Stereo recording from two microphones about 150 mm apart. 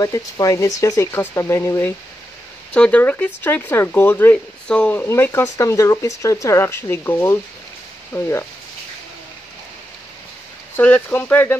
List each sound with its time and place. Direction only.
0.0 s speech: 20° left (ahead or behind)
10.8 s speech: 10° left (ahead or behind)